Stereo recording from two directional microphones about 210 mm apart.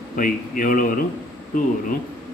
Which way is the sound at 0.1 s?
40° left (ahead or behind).